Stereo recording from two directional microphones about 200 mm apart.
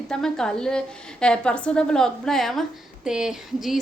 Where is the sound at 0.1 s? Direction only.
5° left (ahead or behind).